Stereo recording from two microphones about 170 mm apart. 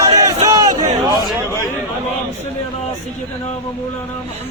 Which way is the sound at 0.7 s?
45° right (ahead or behind).